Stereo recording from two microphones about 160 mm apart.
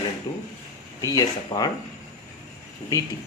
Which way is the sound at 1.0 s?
25° left (ahead or behind).